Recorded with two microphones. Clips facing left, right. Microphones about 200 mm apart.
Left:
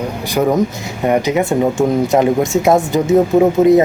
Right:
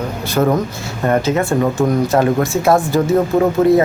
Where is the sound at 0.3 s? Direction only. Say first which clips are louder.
Left 1 dB; 10° left (ahead or behind).